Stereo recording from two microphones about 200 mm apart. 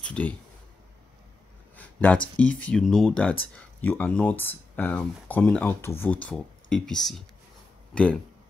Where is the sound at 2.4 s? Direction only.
75° left (ahead or behind).